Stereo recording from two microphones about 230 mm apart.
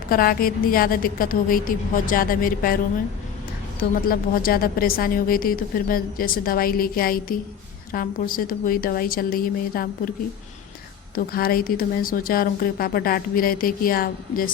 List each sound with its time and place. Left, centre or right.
0.1 s speech: left
4.0 s speech: left
11.1 s speech: left